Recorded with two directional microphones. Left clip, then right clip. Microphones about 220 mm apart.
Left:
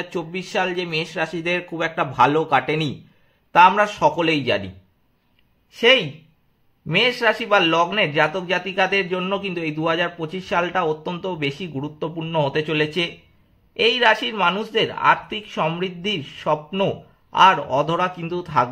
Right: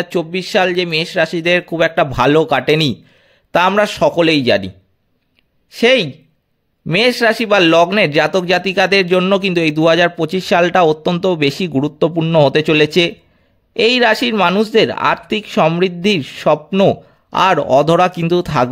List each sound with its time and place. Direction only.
0.0 s speech: 40° right (ahead or behind)
5.7 s speech: 50° right (ahead or behind)